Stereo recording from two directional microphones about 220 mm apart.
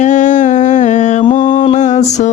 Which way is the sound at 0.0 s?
35° left (ahead or behind).